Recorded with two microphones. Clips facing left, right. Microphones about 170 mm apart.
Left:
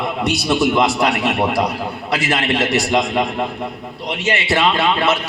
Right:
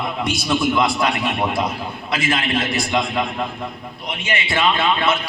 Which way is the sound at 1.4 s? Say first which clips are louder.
Left 3 dB; 40° left (ahead or behind).